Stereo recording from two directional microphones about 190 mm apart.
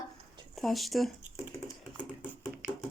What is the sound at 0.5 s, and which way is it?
Speech, centre (ahead or behind).